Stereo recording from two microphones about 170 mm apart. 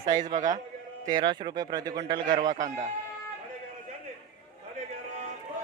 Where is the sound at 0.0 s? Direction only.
25° right (ahead or behind).